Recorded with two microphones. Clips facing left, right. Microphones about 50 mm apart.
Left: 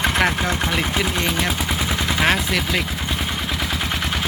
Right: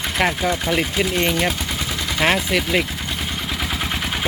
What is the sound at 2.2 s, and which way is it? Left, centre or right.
Speech, centre.